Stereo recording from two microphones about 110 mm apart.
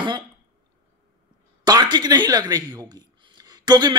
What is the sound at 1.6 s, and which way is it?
Speech, 40° right (ahead or behind).